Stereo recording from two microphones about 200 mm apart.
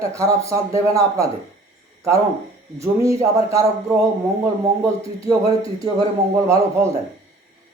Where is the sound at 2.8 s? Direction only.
15° right (ahead or behind).